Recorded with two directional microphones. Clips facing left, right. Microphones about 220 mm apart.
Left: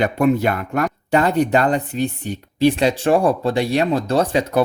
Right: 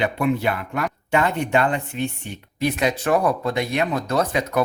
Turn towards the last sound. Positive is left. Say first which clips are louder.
# left 4 dB
turn(degrees=30)  # may be behind; listen again after turning